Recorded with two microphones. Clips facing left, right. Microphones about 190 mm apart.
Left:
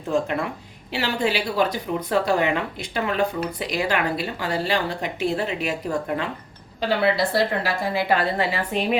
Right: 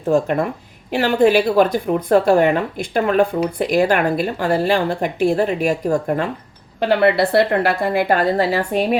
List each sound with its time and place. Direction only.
0.1 s a woman's voice: 50° right (ahead or behind)
6.7 s a woman's voice: 60° right (ahead or behind)